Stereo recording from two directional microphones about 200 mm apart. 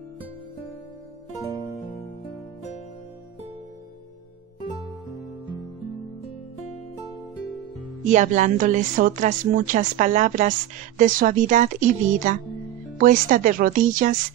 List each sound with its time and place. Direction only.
8.0 s speech: 35° right (ahead or behind)